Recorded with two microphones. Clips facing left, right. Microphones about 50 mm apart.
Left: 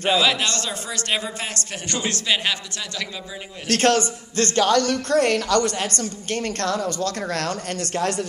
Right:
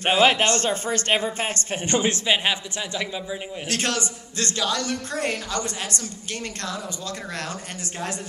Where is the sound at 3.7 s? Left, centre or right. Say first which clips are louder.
Left 8 dB; left.